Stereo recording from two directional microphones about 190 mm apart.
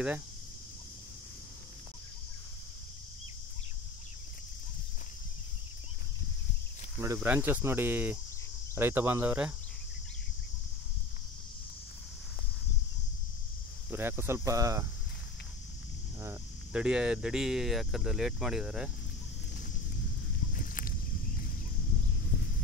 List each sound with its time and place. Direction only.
7.2 s speech: 10° right (ahead or behind)
13.8 s speech: 10° right (ahead or behind)
16.2 s speech: 10° right (ahead or behind)
20.5 s walk: 45° left (ahead or behind)